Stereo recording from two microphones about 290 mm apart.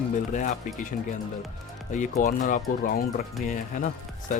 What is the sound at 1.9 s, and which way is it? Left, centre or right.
Speech, left.